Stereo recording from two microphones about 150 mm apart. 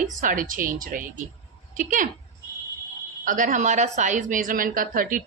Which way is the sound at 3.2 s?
60° right (ahead or behind).